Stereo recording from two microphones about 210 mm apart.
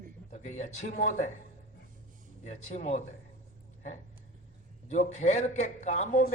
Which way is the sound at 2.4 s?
35° left (ahead or behind).